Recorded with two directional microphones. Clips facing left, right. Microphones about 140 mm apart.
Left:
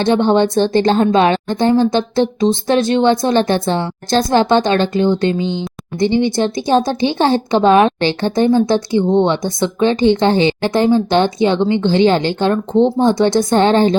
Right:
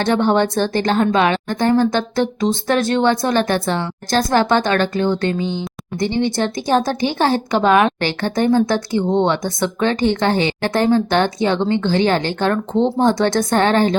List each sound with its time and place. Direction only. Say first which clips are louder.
0.0 s a woman's voice: left 3 dB; 25° left (ahead or behind)